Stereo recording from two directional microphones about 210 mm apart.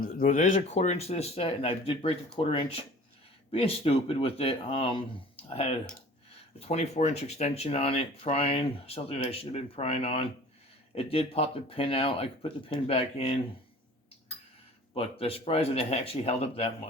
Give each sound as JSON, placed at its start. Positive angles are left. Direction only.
{"t": 0.0, "sound": "speech", "side_deg": 40}
{"t": 14.9, "sound": "speech", "side_deg": 25}